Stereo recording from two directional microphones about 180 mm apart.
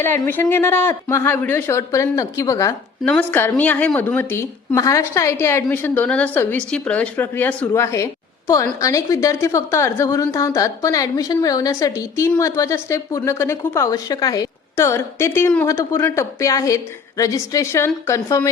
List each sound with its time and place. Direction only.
0.0 s a woman's voice: 10° left (ahead or behind)
3.0 s a woman's voice: 5° left (ahead or behind)